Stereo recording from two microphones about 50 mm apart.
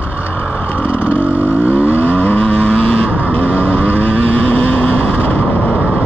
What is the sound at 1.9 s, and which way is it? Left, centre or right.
Vehicle, left.